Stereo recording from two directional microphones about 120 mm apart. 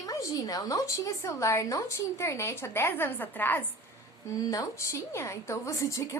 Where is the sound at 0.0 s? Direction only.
30° left (ahead or behind).